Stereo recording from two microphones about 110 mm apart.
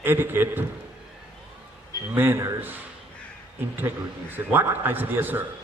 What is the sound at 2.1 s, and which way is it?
Speech, 20° right (ahead or behind).